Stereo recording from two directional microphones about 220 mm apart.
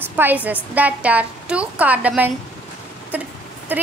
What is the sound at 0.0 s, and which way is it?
A woman's voice, 10° right (ahead or behind).